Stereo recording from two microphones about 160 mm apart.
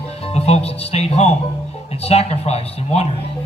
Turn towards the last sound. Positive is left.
turn(degrees=40)  # may be behind; listen again after turning